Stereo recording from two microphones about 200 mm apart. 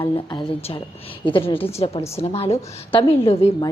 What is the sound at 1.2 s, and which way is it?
A woman's voice, 25° left (ahead or behind).